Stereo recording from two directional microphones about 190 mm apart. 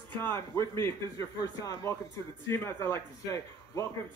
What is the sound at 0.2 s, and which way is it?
Speech, 15° left (ahead or behind).